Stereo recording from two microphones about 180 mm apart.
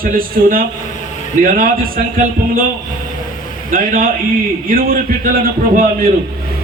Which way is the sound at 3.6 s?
50° right (ahead or behind).